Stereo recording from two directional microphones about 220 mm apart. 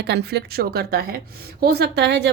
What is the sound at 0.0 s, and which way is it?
A woman's voice, 50° right (ahead or behind).